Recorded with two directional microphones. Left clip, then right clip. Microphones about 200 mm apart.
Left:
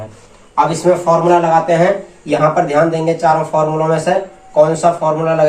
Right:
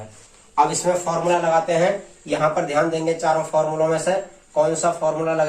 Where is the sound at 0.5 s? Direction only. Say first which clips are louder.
Left 6 dB; 25° right (ahead or behind).